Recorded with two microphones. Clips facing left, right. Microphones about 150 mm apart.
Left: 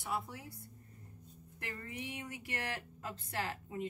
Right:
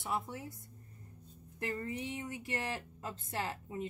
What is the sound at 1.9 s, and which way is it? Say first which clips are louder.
A woman's voice: right 4 dB; 25° right (ahead or behind).